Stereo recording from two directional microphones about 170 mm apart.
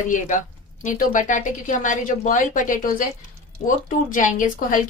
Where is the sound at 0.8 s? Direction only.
50° left (ahead or behind).